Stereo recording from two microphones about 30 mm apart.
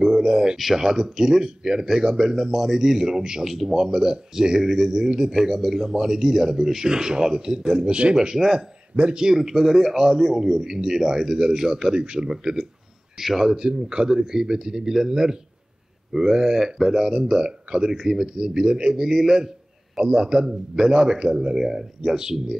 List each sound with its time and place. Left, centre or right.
0.0 s a sound: centre
0.7 s a man's voice: centre
5.9 s a man's voice: centre
8.9 s speech: right
9.2 s a man's voice: centre
12.0 s a man's voice: right
13.2 s a man's voice: centre
13.6 s a man's voice: right
17.2 s a man's voice: right
17.9 s a man's voice: centre
18.4 s a man's voice: right
18.9 s a man's voice: centre